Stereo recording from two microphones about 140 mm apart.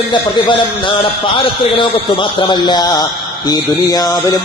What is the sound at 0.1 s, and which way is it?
A man's voice, 35° left (ahead or behind).